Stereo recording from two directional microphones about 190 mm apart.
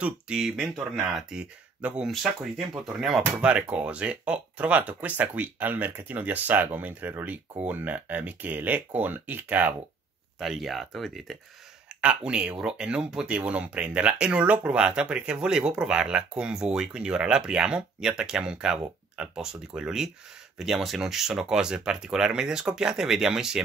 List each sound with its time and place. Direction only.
0.0 s speech: 5° right (ahead or behind)